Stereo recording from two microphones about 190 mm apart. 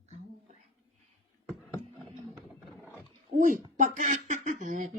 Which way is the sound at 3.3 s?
45° right (ahead or behind).